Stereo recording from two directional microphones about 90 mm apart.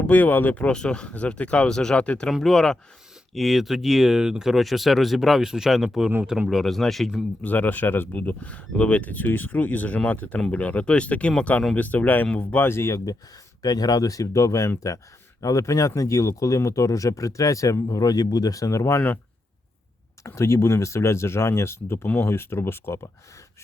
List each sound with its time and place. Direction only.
0.0 s speech: 20° left (ahead or behind); by 7.3 s centre (ahead or behind)
7.4 s speech: 20° left (ahead or behind)
13.6 s speech: 45° left (ahead or behind); by 19.2 s 25° left (ahead or behind)
20.2 s speech: 30° left (ahead or behind)